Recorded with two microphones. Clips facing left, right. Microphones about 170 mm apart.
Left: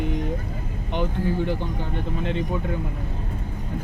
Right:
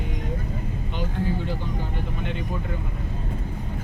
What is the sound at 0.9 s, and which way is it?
Speech, 60° left (ahead or behind).